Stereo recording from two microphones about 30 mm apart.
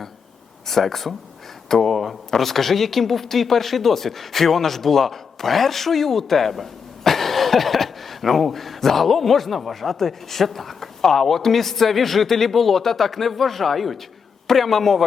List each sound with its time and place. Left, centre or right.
0.7 s a man's voice: centre